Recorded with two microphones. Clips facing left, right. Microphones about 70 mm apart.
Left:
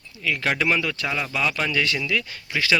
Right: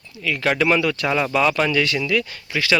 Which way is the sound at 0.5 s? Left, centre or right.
Centre.